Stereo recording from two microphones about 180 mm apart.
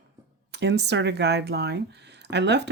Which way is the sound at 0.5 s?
70° right (ahead or behind).